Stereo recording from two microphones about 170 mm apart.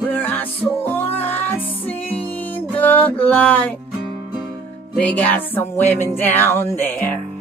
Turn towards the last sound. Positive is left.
turn(degrees=10)  # may be behind; listen again after turning